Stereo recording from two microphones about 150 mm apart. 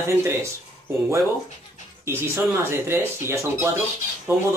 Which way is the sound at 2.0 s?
15° right (ahead or behind).